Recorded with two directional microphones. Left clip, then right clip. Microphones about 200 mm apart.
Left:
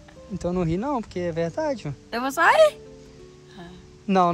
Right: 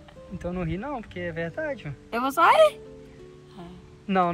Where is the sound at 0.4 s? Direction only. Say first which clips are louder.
Left 6 dB; 25° left (ahead or behind).